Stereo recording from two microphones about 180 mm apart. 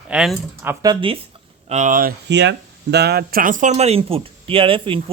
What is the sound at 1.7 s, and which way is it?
Speech, 45° right (ahead or behind).